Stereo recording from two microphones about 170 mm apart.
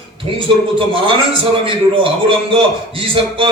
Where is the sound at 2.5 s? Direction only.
30° right (ahead or behind).